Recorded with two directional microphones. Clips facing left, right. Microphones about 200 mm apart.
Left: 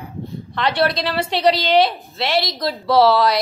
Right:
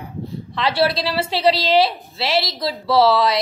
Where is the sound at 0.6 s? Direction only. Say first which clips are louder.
Even; 5° right (ahead or behind).